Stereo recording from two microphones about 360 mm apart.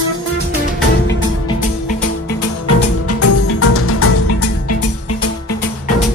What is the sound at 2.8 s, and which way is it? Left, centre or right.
Music, left.